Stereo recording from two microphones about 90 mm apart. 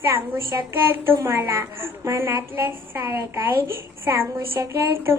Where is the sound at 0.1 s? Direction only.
25° right (ahead or behind).